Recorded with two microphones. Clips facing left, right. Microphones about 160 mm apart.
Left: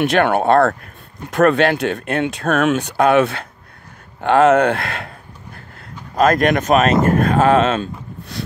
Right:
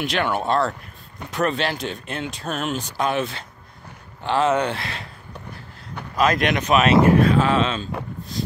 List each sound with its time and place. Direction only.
0.0 s speech: 60° left (ahead or behind)
6.1 s speech: 45° left (ahead or behind)
8.3 s a sound: 70° left (ahead or behind)